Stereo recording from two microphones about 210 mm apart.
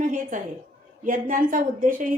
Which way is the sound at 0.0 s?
40° right (ahead or behind).